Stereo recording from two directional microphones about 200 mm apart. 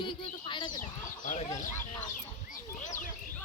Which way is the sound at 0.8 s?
40° left (ahead or behind).